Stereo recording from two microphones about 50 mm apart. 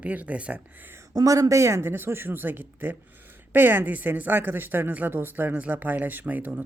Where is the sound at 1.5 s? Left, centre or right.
Right.